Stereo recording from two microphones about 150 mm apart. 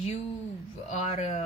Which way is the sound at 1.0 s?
50° left (ahead or behind).